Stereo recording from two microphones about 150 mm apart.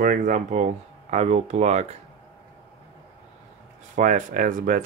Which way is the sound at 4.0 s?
60° right (ahead or behind).